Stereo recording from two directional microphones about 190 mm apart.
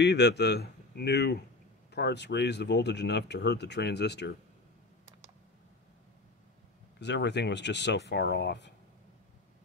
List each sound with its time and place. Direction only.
0.0 s speech: 65° left (ahead or behind)
7.0 s speech: 65° left (ahead or behind)